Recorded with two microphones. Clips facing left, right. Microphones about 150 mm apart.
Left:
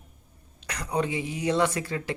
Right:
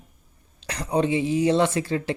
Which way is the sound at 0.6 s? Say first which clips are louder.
Right 5 dB; 30° right (ahead or behind).